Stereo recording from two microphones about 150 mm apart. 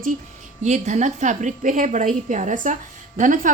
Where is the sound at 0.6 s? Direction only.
50° right (ahead or behind).